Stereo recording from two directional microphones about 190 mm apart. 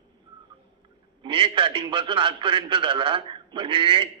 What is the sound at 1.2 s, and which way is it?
A man's voice, 25° right (ahead or behind).